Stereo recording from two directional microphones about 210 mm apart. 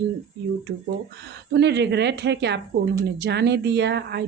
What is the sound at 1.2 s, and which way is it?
Speech, 55° right (ahead or behind).